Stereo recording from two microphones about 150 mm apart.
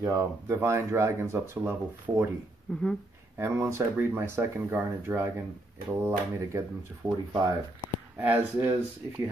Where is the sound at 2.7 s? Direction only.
5° left (ahead or behind).